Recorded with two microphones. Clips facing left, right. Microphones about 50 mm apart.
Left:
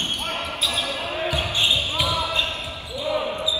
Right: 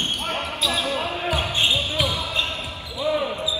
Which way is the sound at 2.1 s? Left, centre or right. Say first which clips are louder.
Left 3 dB; left.